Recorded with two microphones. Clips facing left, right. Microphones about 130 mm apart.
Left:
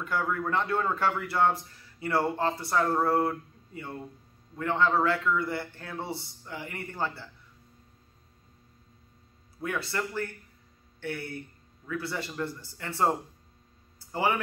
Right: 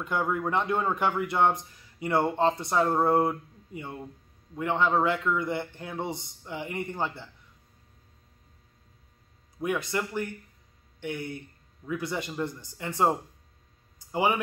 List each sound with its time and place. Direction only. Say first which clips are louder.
0.0 s speech: right 2 dB; 20° right (ahead or behind)
9.6 s a man's voice: right 3 dB; 15° right (ahead or behind)
13.9 s a sound: right 2 dB; 15° right (ahead or behind)